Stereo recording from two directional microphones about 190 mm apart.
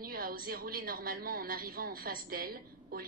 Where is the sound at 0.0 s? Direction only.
50° right (ahead or behind).